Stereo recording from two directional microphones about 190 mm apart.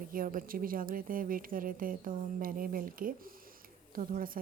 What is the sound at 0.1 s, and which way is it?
A woman's voice, 45° right (ahead or behind).